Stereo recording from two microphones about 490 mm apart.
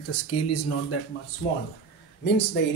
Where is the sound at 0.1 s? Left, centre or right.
Left.